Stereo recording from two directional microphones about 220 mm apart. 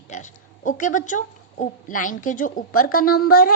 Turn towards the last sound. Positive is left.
turn(degrees=40)  # may be behind; listen again after turning